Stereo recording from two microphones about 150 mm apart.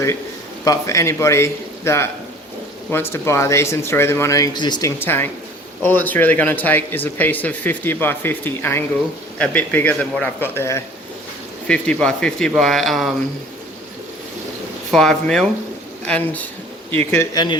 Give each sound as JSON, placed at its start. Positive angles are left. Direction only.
{"t": 0.6, "sound": "a man's voice", "side_deg": 20}
{"t": 11.7, "sound": "speech", "side_deg": 5}
{"t": 14.8, "sound": "speech", "side_deg": 5}
{"t": 17.3, "sound": "speech", "side_deg": 30}